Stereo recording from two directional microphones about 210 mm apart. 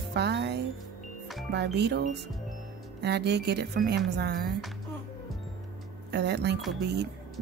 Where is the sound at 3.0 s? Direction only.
55° right (ahead or behind).